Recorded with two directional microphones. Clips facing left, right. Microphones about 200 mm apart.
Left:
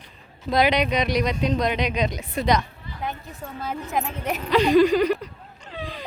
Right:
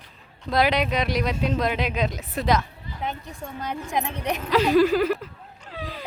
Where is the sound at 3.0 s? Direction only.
20° right (ahead or behind).